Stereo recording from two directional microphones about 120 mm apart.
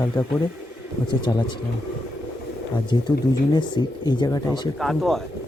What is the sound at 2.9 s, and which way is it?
Speech, 40° left (ahead or behind).